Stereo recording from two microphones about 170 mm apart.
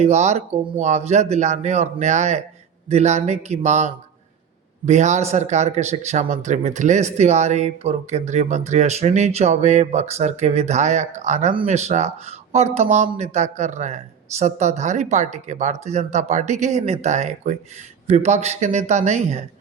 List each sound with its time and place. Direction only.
0.0 s a man's voice: 40° right (ahead or behind)